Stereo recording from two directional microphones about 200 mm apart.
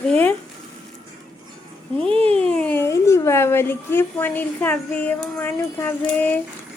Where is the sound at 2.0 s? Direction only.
25° right (ahead or behind).